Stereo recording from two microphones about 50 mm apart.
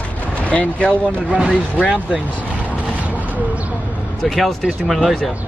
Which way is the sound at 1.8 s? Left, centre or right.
Right.